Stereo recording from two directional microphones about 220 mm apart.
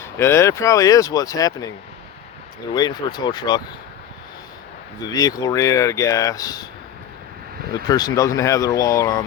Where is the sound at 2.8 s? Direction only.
20° left (ahead or behind).